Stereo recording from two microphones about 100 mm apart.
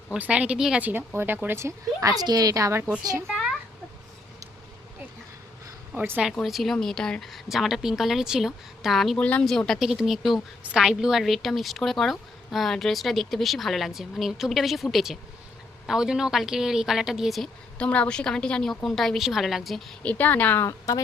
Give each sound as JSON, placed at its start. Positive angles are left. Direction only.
{"t": 0.1, "sound": "speech", "side_deg": -15}
{"t": 3.2, "sound": "a sound", "side_deg": 0}
{"t": 6.0, "sound": "speech", "side_deg": -15}
{"t": 6.4, "sound": "a woman's voice", "side_deg": 0}
{"t": 9.2, "sound": "speech", "side_deg": 15}
{"t": 9.5, "sound": "a woman's voice", "side_deg": 5}
{"t": 17.7, "sound": "a woman's voice", "side_deg": 10}
{"t": 20.0, "sound": "speech", "side_deg": 15}
{"t": 20.7, "sound": "speech", "side_deg": 35}